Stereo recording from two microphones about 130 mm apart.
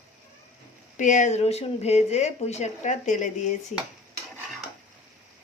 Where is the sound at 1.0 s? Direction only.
70° left (ahead or behind).